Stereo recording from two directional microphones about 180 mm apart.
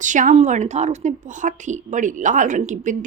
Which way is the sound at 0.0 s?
45° right (ahead or behind).